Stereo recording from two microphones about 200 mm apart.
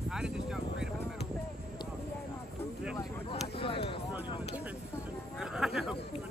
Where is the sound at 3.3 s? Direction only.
25° left (ahead or behind).